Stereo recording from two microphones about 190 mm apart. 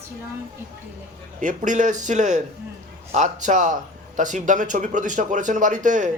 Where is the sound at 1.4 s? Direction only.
40° right (ahead or behind).